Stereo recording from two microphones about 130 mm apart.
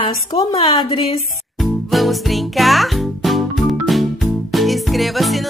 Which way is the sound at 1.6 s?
Centre (ahead or behind).